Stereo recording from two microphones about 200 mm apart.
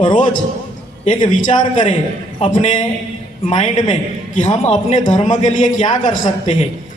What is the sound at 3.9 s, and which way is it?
A man's voice, 35° left (ahead or behind).